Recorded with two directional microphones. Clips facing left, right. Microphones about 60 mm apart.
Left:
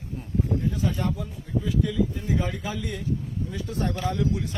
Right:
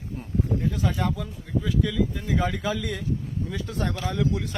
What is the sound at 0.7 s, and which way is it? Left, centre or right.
Speech, right.